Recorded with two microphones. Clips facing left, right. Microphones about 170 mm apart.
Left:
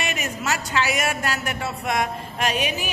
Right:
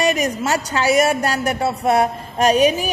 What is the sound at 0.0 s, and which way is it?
A woman's voice, 35° right (ahead or behind).